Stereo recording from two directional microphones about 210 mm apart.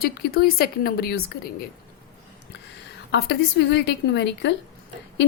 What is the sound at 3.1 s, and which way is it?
A woman's voice, 55° left (ahead or behind).